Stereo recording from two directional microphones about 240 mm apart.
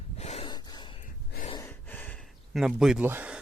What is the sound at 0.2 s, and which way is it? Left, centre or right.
Gasp, left.